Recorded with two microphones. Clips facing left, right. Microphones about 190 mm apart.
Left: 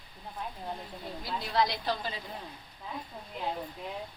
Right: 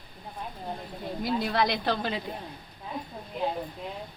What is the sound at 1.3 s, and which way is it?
Speech, 60° right (ahead or behind).